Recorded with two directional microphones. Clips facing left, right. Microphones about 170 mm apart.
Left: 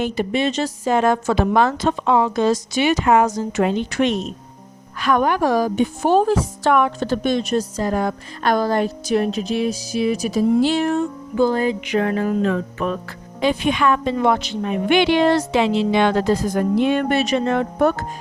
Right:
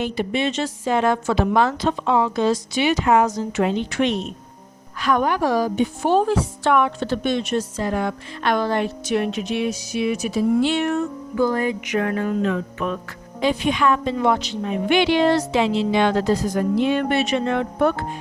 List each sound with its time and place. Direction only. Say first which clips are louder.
0.0 s a woman's voice: left 2 dB; 45° left (ahead or behind)
4.9 s a woman's voice: left 2 dB; 55° left (ahead or behind); by 13.1 s 40° left (ahead or behind)
13.4 s a woman's voice: left 1 dB; 60° left (ahead or behind); by 18.0 s 40° left (ahead or behind)